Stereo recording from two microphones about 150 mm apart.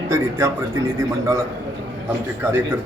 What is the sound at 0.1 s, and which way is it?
A man's voice, 20° right (ahead or behind).